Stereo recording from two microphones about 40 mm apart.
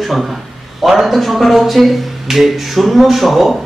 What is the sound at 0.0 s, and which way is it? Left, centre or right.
A man's voice, centre.